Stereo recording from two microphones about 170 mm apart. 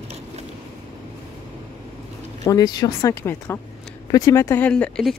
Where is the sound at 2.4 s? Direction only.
20° left (ahead or behind); by 5.2 s 5° left (ahead or behind).